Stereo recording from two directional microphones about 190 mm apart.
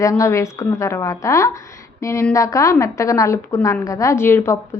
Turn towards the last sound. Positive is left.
turn(degrees=15)  # may be behind; listen again after turning